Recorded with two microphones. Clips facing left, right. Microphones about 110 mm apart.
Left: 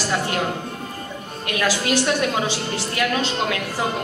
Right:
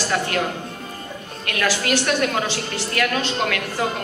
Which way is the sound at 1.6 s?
15° left (ahead or behind).